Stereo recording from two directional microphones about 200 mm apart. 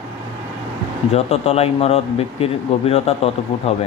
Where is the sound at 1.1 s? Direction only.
30° left (ahead or behind).